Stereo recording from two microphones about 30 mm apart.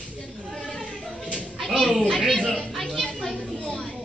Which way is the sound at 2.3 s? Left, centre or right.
Centre.